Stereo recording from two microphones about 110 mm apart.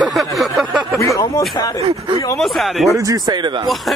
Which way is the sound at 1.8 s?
55° right (ahead or behind).